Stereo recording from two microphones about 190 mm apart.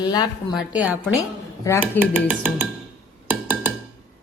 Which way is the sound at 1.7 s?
15° left (ahead or behind).